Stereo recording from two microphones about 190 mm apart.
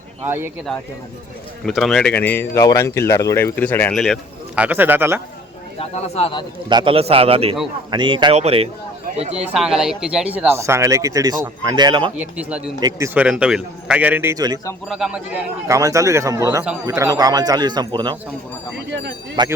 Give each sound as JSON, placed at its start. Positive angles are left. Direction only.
{"t": 0.3, "sound": "speech", "side_deg": -10}
{"t": 1.6, "sound": "a man's voice", "side_deg": 0}
{"t": 5.8, "sound": "speech", "side_deg": 30}
{"t": 6.7, "sound": "a man's voice", "side_deg": -25}
{"t": 9.0, "sound": "a sound", "side_deg": -35}
{"t": 9.3, "sound": "a man's voice", "side_deg": -5}
{"t": 12.4, "sound": "a man's voice", "side_deg": -5}
{"t": 14.8, "sound": "a man's voice", "side_deg": 0}
{"t": 15.6, "sound": "a man's voice", "side_deg": -15}
{"t": 18.9, "sound": "speech", "side_deg": -65}
{"t": 19.4, "sound": "a man's voice", "side_deg": -25}